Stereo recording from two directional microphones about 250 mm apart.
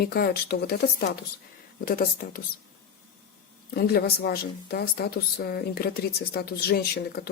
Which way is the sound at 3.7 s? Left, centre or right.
Left.